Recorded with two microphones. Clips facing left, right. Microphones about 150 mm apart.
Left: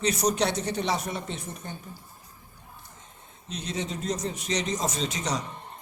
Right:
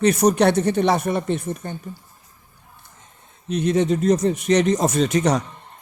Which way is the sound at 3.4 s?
60° right (ahead or behind).